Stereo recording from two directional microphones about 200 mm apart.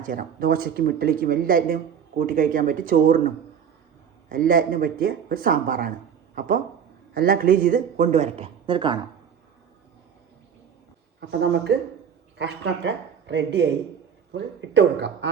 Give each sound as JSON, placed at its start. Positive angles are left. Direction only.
{"t": 0.0, "sound": "speech", "side_deg": -45}
{"t": 4.3, "sound": "speech", "side_deg": -45}
{"t": 11.2, "sound": "speech", "side_deg": -55}